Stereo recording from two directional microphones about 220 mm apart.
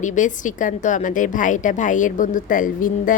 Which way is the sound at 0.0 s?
35° left (ahead or behind).